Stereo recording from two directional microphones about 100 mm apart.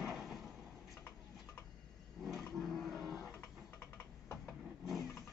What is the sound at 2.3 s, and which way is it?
Livestock, centre (ahead or behind).